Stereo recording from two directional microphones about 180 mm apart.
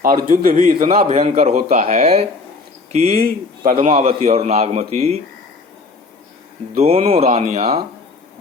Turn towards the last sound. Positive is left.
turn(degrees=-40)  # may be behind; listen again after turning